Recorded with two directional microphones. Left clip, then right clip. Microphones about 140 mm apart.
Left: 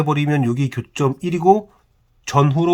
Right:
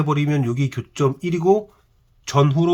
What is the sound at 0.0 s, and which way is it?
Speech, 40° left (ahead or behind).